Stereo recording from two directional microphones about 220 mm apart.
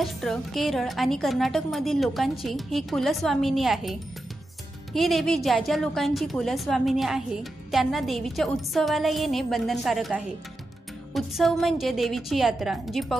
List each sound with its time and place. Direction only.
0.0 s a woman's voice: centre (ahead or behind)